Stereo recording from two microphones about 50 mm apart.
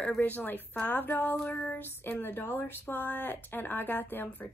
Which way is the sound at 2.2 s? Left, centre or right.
Left.